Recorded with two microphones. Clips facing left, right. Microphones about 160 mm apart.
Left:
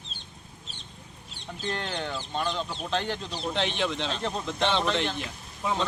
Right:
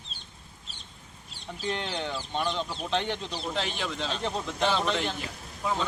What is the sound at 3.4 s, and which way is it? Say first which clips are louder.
A man's voice: left 5 dB; 5° right (ahead or behind).